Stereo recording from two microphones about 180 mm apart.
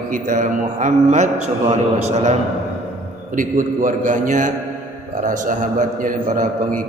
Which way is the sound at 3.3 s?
45° right (ahead or behind).